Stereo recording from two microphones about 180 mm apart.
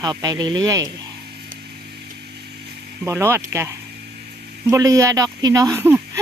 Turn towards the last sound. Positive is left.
turn(degrees=-15)  # may be behind; listen again after turning